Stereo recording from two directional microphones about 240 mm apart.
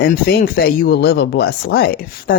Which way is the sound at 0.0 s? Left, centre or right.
Left.